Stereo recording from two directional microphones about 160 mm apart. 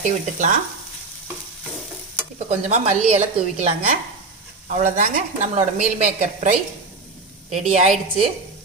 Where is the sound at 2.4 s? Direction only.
40° right (ahead or behind).